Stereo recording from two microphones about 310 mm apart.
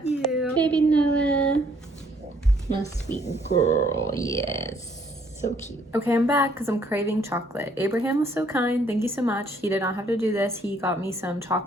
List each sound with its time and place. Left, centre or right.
0.3 s a sound: centre
2.8 s speech: centre
3.2 s speech: left
4.1 s speech: centre
5.4 s speech: left
5.9 s a woman's voice: centre